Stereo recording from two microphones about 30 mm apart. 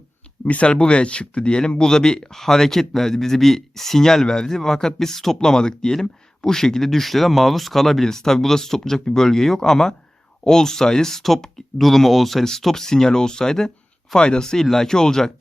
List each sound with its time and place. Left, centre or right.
0.4 s speech: left; by 8.0 s centre
8.0 s speech: centre
11.5 s speech: centre
12.7 s speech: centre